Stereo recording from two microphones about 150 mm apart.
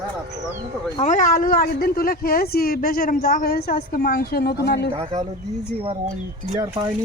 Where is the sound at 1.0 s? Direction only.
60° left (ahead or behind); by 4.8 s 90° left.